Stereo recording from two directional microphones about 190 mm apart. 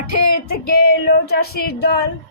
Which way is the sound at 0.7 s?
55° left (ahead or behind).